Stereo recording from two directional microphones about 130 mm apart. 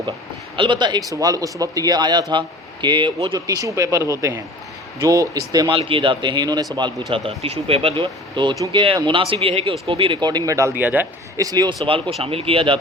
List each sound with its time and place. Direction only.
0.5 s speech: 40° right (ahead or behind)
5.7 s speech: 40° right (ahead or behind)
7.1 s speech: 45° right (ahead or behind); by 11.0 s 15° right (ahead or behind)
11.3 s speech: 30° right (ahead or behind)